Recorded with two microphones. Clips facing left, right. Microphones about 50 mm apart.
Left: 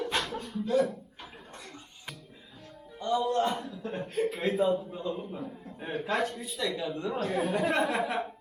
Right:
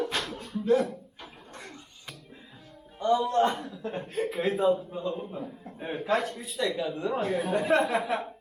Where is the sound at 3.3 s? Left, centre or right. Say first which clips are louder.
Right 3 dB; right.